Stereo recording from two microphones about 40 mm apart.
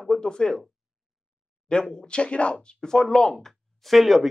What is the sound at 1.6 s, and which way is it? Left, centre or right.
A man's voice, left.